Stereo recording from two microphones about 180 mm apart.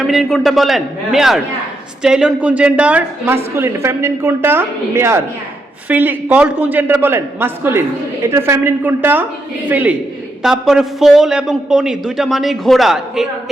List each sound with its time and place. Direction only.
0.1 s a man's voice: centre (ahead or behind)